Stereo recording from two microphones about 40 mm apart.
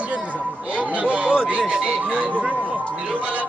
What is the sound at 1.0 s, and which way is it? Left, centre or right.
Speech, right.